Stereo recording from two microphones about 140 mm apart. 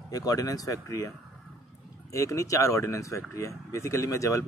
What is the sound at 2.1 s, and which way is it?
Speech, 20° left (ahead or behind).